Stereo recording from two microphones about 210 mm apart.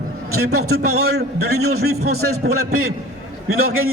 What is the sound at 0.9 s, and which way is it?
A man's voice, 90° right.